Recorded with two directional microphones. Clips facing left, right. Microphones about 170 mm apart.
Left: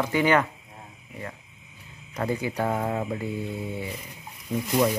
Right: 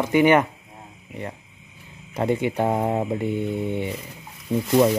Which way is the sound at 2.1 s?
25° right (ahead or behind).